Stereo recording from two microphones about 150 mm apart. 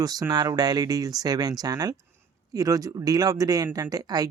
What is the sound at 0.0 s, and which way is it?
Speech, 25° right (ahead or behind).